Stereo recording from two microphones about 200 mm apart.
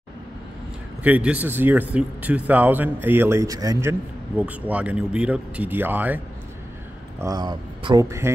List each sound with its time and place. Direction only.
1.0 s speech: 5° right (ahead or behind)